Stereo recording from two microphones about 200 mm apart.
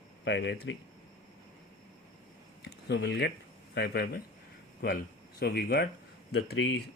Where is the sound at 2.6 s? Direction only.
60° left (ahead or behind).